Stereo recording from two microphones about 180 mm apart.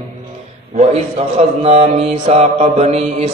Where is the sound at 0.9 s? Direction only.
35° right (ahead or behind).